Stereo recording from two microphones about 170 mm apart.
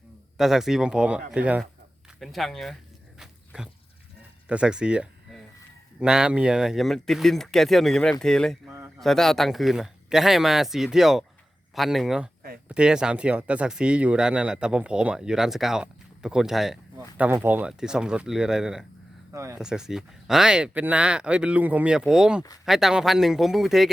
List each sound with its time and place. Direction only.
0.3 s speech: centre (ahead or behind)
3.2 s a sound: 5° right (ahead or behind)
4.4 s speech: 5° right (ahead or behind)
19.3 s speech: 15° right (ahead or behind)
19.5 s speech: 5° right (ahead or behind)